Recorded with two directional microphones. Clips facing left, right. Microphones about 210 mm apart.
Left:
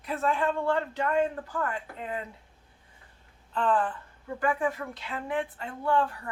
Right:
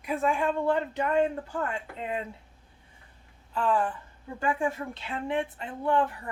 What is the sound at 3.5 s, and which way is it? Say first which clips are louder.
Speech: even; 10° right (ahead or behind).